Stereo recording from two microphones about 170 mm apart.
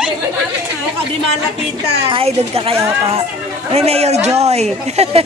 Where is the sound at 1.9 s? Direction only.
35° right (ahead or behind).